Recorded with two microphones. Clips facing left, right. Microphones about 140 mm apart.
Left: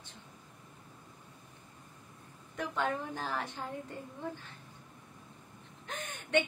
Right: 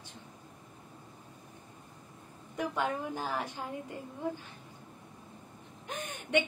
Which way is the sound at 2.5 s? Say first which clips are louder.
Right 1 dB; 10° right (ahead or behind).